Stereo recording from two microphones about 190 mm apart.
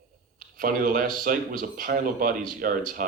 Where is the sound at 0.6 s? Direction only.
45° right (ahead or behind).